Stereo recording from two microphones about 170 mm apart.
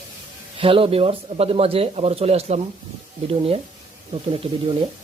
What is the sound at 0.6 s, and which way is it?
Speech, 35° right (ahead or behind).